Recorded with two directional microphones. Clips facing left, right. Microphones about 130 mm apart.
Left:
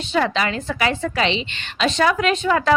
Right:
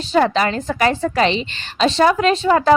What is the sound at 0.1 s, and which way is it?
A woman's voice, 40° right (ahead or behind).